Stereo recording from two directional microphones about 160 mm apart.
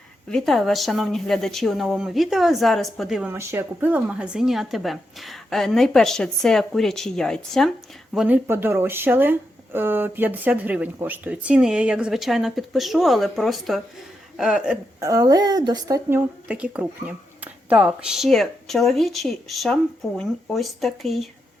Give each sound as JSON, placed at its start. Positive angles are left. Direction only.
{"t": 0.3, "sound": "speech", "side_deg": 0}
{"t": 3.3, "sound": "speech", "side_deg": -15}
{"t": 8.1, "sound": "speech", "side_deg": -10}
{"t": 15.0, "sound": "speech", "side_deg": -20}
{"t": 16.0, "sound": "speech", "side_deg": -10}